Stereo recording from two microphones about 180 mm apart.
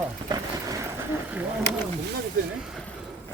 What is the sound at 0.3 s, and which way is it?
Vehicle, 20° right (ahead or behind).